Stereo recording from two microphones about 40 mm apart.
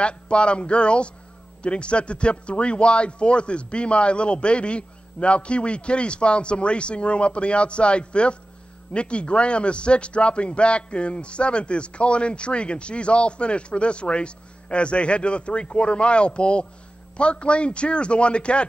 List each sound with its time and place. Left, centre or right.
0.0 s a man's voice: left